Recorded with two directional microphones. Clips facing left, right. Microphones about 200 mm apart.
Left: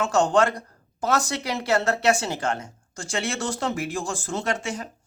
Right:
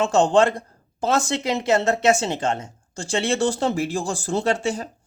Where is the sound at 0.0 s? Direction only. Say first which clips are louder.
Right 3 dB; 25° right (ahead or behind).